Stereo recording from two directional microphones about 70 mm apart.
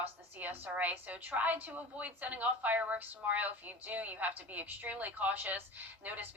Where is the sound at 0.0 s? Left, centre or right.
Right.